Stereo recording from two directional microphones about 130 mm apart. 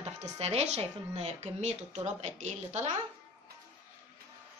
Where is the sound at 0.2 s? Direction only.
55° right (ahead or behind).